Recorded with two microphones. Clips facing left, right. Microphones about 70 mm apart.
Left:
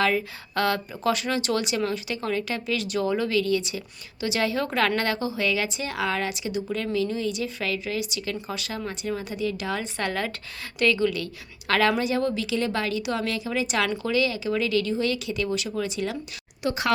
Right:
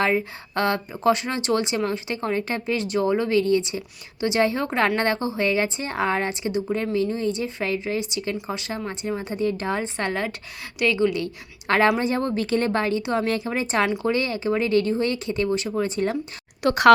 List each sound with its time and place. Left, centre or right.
0.0 s speech: right
16.6 s speech: right